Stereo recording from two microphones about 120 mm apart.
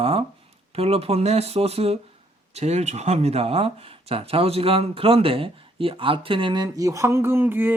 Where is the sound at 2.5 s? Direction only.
65° right (ahead or behind); by 7.7 s 20° right (ahead or behind).